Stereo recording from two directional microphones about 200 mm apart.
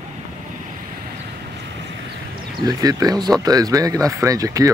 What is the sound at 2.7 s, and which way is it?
Speech, 20° right (ahead or behind).